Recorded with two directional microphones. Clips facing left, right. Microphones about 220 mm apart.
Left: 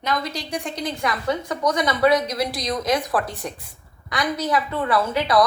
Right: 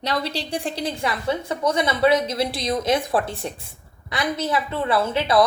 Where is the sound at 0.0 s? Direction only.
35° right (ahead or behind).